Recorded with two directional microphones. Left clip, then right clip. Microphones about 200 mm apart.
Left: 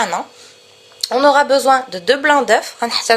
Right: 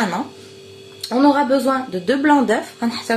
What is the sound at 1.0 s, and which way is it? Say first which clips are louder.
A woman's voice: left 4 dB; 45° left (ahead or behind).